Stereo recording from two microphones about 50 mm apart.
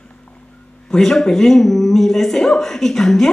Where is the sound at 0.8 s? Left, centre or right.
Centre.